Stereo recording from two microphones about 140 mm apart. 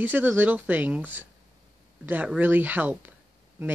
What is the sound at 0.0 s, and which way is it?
Speech, 15° right (ahead or behind).